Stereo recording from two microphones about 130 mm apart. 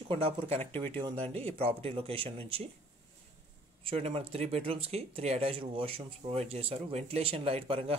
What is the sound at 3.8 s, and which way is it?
Speech, 50° right (ahead or behind).